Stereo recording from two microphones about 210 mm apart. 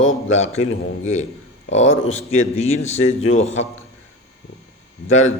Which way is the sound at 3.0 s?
70° left (ahead or behind).